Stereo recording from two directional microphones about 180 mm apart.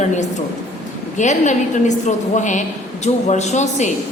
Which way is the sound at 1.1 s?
40° left (ahead or behind).